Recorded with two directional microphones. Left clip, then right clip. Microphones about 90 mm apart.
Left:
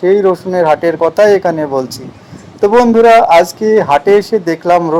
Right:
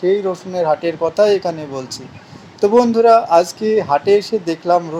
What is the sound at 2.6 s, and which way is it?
Speech, 5° left (ahead or behind).